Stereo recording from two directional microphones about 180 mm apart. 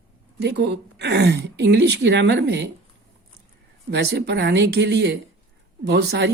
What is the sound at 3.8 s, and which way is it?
Speech, 65° right (ahead or behind).